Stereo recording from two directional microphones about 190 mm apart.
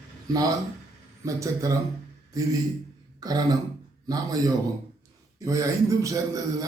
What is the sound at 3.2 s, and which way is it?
Throat clearing, 20° right (ahead or behind).